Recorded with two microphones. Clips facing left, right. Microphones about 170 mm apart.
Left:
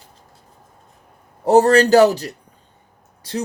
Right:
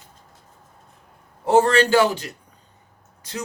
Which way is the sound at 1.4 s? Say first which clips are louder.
Left 4 dB; 40° left (ahead or behind).